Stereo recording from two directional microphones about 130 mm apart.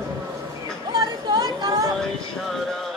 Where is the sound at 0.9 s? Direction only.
35° right (ahead or behind).